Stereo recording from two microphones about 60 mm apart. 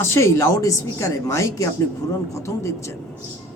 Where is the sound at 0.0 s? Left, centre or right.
Left.